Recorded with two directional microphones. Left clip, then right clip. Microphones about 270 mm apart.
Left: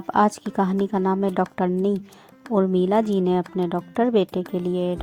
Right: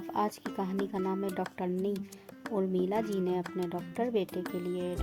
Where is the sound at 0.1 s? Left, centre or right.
Left.